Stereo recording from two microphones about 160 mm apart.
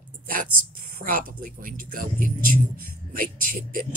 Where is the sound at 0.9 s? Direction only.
65° right (ahead or behind).